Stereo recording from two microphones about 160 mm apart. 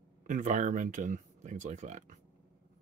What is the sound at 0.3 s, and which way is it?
Speech, 50° right (ahead or behind).